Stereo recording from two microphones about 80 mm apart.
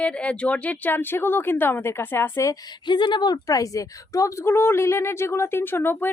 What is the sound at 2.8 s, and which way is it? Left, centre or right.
Speech, left.